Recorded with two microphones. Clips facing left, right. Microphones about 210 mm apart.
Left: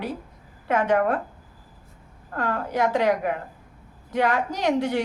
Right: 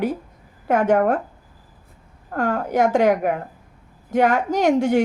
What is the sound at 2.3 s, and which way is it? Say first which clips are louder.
A woman's voice: right 5 dB; 50° right (ahead or behind).